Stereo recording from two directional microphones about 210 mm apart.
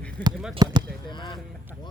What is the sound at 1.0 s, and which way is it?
Speech, 20° left (ahead or behind).